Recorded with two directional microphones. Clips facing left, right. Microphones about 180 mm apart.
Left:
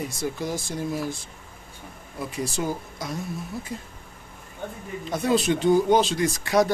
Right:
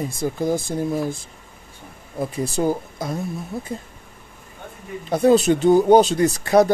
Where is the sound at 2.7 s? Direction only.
55° right (ahead or behind).